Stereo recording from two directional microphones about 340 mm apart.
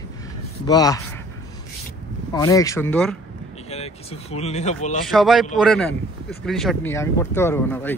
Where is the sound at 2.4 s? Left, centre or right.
Centre.